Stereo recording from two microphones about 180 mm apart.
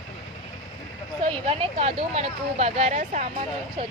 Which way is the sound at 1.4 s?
35° right (ahead or behind).